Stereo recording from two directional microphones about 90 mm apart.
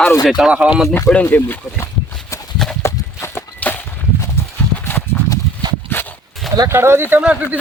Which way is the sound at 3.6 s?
15° left (ahead or behind).